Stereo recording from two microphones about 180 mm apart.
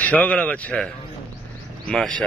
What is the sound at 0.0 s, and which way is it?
Speech, 10° left (ahead or behind).